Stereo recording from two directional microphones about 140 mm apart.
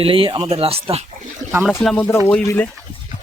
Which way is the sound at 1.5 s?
5° right (ahead or behind).